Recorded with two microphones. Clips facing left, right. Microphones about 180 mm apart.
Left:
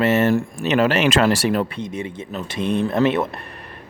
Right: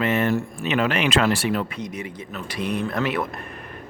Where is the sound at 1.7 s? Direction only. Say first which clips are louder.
Left 4 dB; 25° left (ahead or behind).